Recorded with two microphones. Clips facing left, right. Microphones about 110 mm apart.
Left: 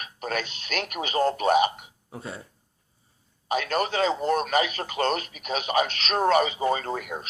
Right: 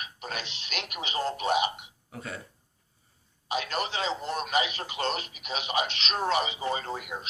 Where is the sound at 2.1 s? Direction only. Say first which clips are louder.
Left 2 dB; 25° left (ahead or behind).